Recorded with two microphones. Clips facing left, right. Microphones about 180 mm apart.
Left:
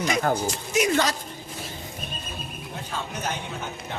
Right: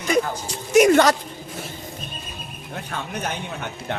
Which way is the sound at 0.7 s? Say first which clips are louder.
Right 9 dB; 55° right (ahead or behind).